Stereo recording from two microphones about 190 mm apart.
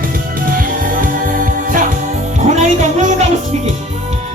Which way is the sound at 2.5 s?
40° right (ahead or behind).